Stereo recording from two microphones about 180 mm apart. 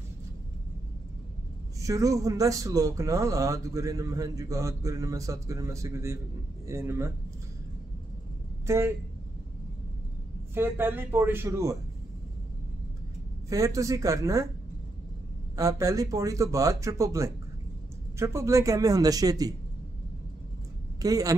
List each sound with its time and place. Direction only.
1.8 s speech: 20° right (ahead or behind)
8.6 s speech: 15° right (ahead or behind)
10.5 s speech: 10° right (ahead or behind)
13.5 s speech: 20° right (ahead or behind)
15.5 s speech: 20° right (ahead or behind)
21.0 s speech: 20° right (ahead or behind)